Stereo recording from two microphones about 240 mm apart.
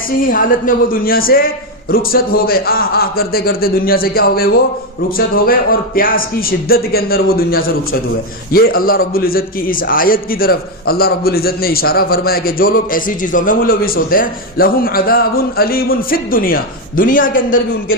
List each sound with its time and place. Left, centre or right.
0.2 s a man's voice: left